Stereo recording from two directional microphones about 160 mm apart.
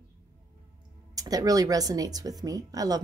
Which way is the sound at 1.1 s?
20° right (ahead or behind).